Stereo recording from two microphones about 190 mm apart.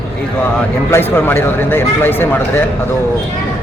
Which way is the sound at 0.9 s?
10° left (ahead or behind).